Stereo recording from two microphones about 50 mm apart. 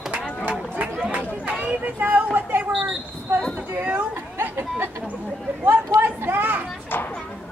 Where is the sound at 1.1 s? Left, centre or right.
Right.